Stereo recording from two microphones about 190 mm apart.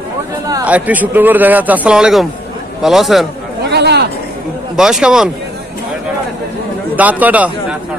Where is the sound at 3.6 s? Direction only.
60° right (ahead or behind).